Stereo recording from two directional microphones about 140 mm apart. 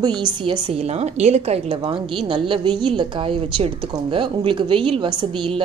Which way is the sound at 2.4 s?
35° right (ahead or behind).